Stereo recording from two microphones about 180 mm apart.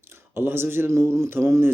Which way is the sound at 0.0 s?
15° right (ahead or behind).